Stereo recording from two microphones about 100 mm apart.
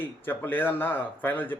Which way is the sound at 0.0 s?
20° left (ahead or behind).